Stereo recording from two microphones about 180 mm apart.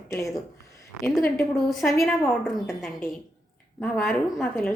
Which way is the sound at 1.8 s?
10° left (ahead or behind).